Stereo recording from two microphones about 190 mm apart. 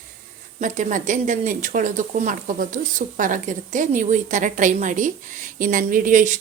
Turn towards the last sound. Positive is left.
turn(degrees=-40)  # may be behind; listen again after turning